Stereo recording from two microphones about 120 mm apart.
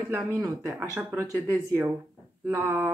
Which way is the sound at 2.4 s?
20° right (ahead or behind).